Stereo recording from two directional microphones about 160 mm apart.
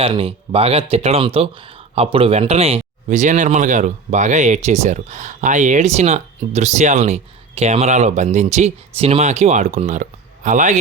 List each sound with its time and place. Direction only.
0.0 s speech: 35° right (ahead or behind); by 10.8 s 50° right (ahead or behind)